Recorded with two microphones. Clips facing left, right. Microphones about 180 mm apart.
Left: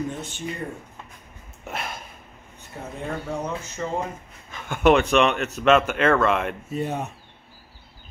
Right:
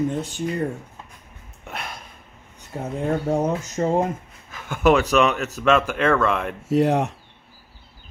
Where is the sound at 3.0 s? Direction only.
45° right (ahead or behind).